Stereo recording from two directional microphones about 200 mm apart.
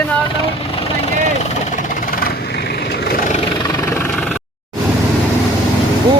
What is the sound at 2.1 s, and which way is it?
Vehicle, 45° left (ahead or behind).